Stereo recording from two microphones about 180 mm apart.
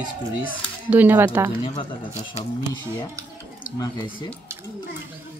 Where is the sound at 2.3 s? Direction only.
25° left (ahead or behind).